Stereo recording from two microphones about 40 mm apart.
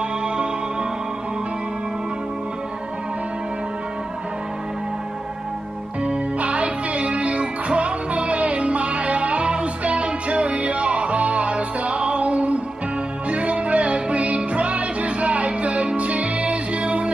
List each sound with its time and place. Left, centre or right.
6.0 s music: right